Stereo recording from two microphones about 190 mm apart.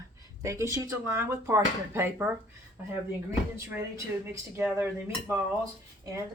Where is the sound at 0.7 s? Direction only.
15° right (ahead or behind).